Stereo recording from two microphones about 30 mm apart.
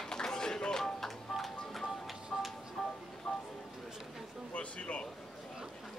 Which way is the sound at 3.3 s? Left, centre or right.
Left.